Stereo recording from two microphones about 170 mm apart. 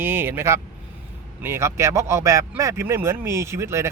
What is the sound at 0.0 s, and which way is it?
Speech, 10° right (ahead or behind).